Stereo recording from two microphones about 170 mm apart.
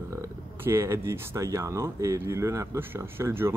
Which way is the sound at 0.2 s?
15° right (ahead or behind).